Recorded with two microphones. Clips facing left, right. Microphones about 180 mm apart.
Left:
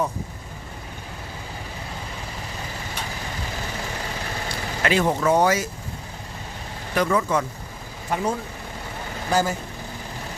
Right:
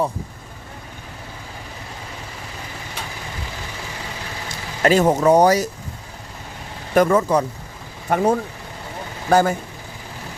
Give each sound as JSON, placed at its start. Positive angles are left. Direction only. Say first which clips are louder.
{"t": 4.4, "sound": "speech", "louder": "right 7 dB", "side_deg": -40}
{"t": 6.9, "sound": "speech", "louder": "right 6 dB", "side_deg": -45}
{"t": 8.1, "sound": "speech", "louder": "right 7 dB", "side_deg": -55}